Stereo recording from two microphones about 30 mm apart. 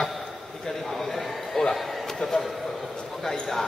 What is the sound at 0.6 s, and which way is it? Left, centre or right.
A man's voice, centre.